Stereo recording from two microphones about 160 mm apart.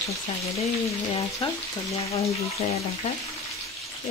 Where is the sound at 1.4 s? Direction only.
35° left (ahead or behind).